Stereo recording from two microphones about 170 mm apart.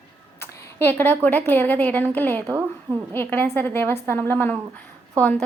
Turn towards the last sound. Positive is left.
turn(degrees=10)  # may be behind; listen again after turning